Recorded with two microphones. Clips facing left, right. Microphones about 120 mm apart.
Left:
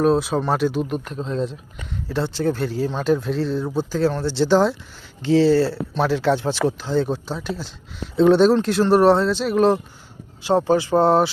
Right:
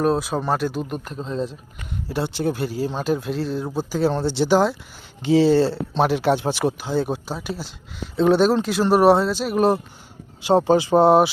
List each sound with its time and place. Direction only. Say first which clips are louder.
0.0 s speech: left 3 dB; centre (ahead or behind)
2.1 s speech: left 2 dB; 15° right (ahead or behind)
5.2 s speech: even; 15° right (ahead or behind)
10.4 s speech: right 1 dB; 20° right (ahead or behind)